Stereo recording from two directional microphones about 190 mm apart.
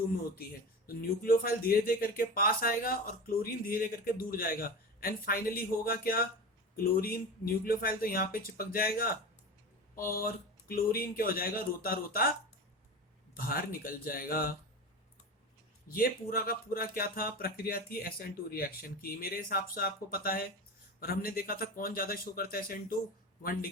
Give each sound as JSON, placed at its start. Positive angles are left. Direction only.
{"t": 0.9, "sound": "speech", "side_deg": 50}
{"t": 13.3, "sound": "speech", "side_deg": 50}
{"t": 15.9, "sound": "speech", "side_deg": 50}